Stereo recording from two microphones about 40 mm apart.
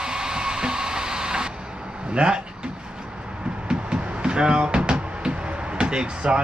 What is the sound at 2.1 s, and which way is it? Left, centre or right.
Speech, right.